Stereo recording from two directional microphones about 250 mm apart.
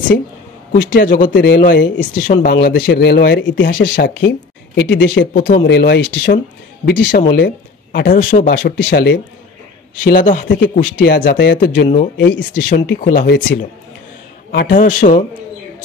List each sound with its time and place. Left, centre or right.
0.7 s speech: left
13.0 s speech: left
14.5 s speech: left